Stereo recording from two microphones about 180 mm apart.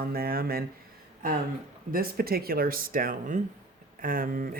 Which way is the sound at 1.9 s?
55° right (ahead or behind).